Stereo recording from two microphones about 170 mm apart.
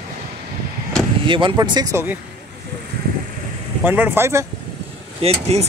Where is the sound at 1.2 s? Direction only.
30° right (ahead or behind).